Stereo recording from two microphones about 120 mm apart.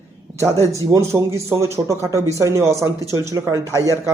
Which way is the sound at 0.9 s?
25° right (ahead or behind).